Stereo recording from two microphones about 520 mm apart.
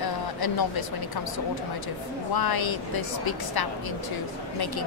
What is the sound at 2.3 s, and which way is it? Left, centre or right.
Speech, left.